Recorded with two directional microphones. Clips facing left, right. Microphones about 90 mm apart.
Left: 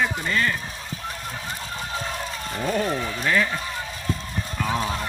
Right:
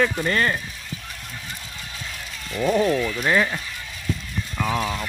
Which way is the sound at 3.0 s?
35° left (ahead or behind).